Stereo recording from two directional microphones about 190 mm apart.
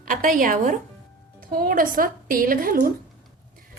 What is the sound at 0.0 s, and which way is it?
A woman's voice, 45° right (ahead or behind).